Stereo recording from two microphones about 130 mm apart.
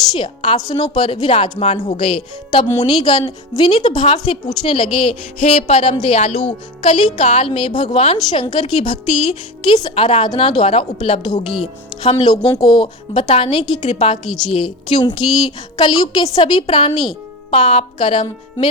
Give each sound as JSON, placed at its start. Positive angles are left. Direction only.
{"t": 0.2, "sound": "a woman's voice", "side_deg": 35}
{"t": 6.8, "sound": "a woman's voice", "side_deg": 45}
{"t": 7.3, "sound": "a woman's voice", "side_deg": 60}
{"t": 7.5, "sound": "a woman's voice", "side_deg": 40}
{"t": 9.9, "sound": "a woman's voice", "side_deg": 45}
{"t": 11.6, "sound": "a woman's voice", "side_deg": 55}
{"t": 12.2, "sound": "a woman's voice", "side_deg": 35}